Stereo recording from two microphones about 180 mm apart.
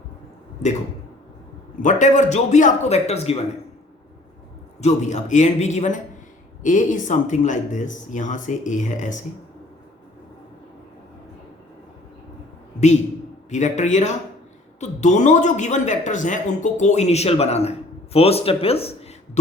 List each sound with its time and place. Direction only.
1.8 s a man's voice: 45° left (ahead or behind)
4.8 s a man's voice: 40° left (ahead or behind)
13.5 s a man's voice: 40° left (ahead or behind)